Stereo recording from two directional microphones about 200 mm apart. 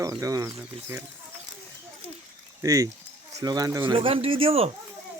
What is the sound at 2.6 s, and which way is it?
Speech, 15° right (ahead or behind).